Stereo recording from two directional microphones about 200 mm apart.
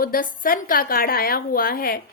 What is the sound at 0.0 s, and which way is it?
A woman's voice, 45° left (ahead or behind).